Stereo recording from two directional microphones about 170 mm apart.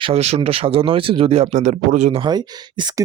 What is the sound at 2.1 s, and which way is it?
Speech, 25° right (ahead or behind).